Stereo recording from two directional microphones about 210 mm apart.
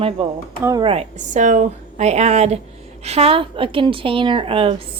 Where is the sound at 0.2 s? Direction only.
25° right (ahead or behind).